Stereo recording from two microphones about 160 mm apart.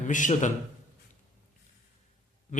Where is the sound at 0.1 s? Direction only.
50° left (ahead or behind).